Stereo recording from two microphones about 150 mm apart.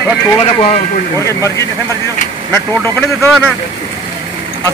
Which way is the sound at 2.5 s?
15° left (ahead or behind).